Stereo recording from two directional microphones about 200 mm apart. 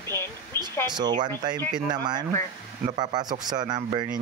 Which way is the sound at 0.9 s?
20° right (ahead or behind).